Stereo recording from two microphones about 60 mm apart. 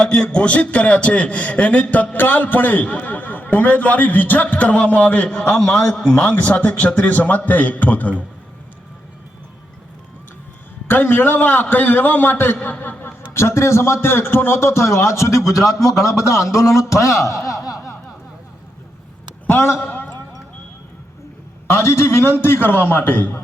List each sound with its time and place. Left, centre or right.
0.0 s a man's voice: centre
10.8 s a man's voice: left
13.3 s a man's voice: left
15.5 s speech: left
19.5 s a man's voice: left
19.8 s a sound: left
21.7 s a man's voice: left